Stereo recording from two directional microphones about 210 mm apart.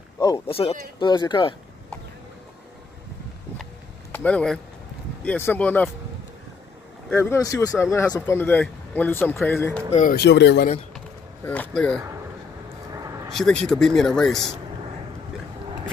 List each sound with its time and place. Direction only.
0.2 s speech: 20° left (ahead or behind)
4.1 s speech: 5° left (ahead or behind)
7.1 s speech: 10° left (ahead or behind)
9.8 s speech: 40° left (ahead or behind)
10.2 s speech: 55° left (ahead or behind)
11.4 s speech: 10° left (ahead or behind)
12.9 s a sound: 15° right (ahead or behind)
13.3 s speech: 5° left (ahead or behind)